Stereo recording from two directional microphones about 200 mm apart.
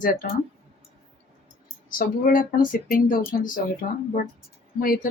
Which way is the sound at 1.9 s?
45° left (ahead or behind).